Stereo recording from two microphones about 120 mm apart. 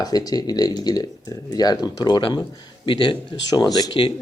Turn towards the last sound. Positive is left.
turn(degrees=40)  # may be behind; listen again after turning